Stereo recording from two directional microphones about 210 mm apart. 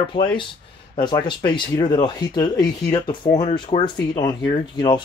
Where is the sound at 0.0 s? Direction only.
25° left (ahead or behind).